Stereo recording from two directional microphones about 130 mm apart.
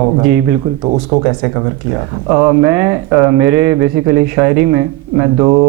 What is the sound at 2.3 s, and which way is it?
Speech, centre (ahead or behind).